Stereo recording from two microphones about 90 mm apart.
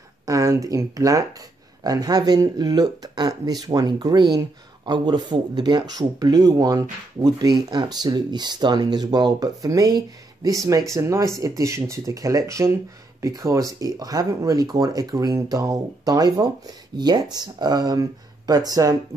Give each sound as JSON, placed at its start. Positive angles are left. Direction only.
{"t": 0.3, "sound": "speech", "side_deg": -40}